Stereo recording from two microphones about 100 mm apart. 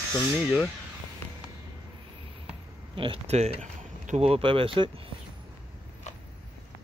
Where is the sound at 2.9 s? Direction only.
60° right (ahead or behind).